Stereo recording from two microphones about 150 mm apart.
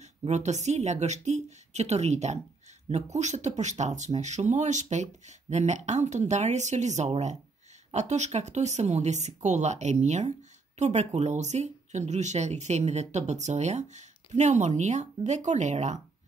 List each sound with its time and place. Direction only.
0.2 s speech: 50° right (ahead or behind)